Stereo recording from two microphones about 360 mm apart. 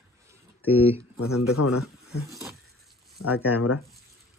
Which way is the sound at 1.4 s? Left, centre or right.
Left.